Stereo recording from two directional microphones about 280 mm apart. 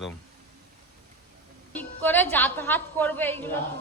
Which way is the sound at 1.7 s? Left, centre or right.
Centre.